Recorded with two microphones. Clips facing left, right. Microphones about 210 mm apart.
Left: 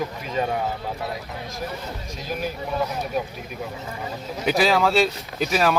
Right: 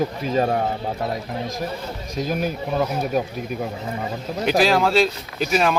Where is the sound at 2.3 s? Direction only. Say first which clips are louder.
Right 2 dB; 50° right (ahead or behind).